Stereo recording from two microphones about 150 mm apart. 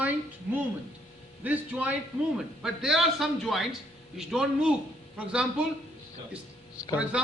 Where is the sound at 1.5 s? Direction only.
10° right (ahead or behind).